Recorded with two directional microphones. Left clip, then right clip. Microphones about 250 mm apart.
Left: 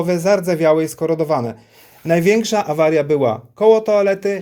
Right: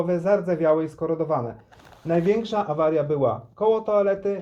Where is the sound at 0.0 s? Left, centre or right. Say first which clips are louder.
Left 6 dB; left.